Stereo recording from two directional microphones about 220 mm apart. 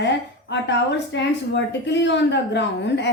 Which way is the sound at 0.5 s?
55° left (ahead or behind).